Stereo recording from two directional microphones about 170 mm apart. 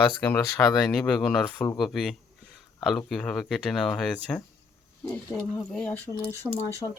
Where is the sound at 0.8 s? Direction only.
Centre (ahead or behind).